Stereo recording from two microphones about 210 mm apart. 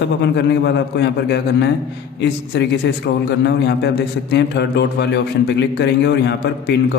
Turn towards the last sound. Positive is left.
turn(degrees=55)  # may be behind; listen again after turning